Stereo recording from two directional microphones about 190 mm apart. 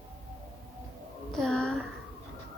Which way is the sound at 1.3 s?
5° left (ahead or behind).